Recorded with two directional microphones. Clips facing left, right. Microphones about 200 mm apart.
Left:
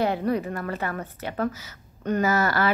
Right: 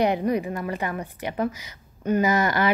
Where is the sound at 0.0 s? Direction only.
15° right (ahead or behind).